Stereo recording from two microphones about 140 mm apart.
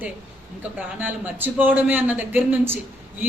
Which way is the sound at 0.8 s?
15° right (ahead or behind).